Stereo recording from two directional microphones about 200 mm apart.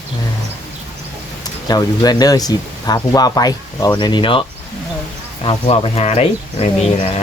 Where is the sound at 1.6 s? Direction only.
20° left (ahead or behind).